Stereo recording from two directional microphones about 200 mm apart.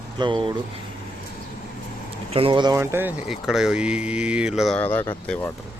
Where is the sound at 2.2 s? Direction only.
25° right (ahead or behind); by 3.1 s 10° right (ahead or behind).